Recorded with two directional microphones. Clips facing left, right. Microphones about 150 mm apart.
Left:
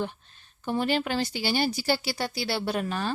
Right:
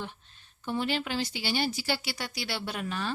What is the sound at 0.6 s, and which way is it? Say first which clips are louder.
Speech: left 4 dB; 45° left (ahead or behind).